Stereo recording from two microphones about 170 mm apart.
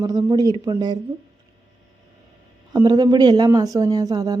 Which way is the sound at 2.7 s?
20° right (ahead or behind).